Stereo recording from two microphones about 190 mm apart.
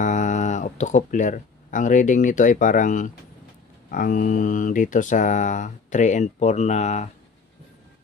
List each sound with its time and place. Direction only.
0.0 s speech: 40° left (ahead or behind)